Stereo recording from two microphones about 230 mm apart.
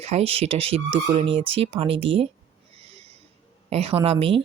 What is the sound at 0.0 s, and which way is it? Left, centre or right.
Speech, right.